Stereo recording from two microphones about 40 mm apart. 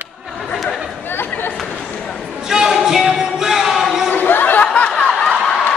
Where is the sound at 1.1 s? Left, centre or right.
Left.